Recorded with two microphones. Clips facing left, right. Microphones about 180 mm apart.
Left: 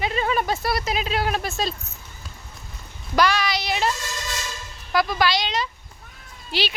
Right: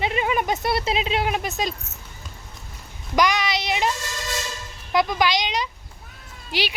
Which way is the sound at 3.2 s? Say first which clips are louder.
Even; 20° right (ahead or behind).